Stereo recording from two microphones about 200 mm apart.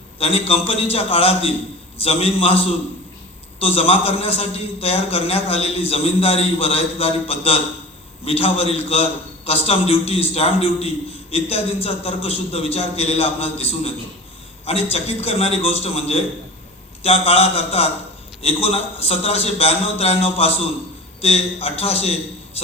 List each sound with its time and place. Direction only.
0.2 s a man's voice: 30° left (ahead or behind)